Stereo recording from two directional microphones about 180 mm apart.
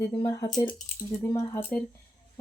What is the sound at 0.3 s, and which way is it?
Speech, 20° left (ahead or behind).